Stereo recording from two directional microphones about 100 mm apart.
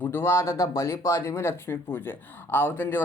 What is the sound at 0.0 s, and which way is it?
Speech, 20° left (ahead or behind).